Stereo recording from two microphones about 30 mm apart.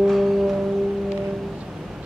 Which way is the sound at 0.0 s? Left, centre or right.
Centre.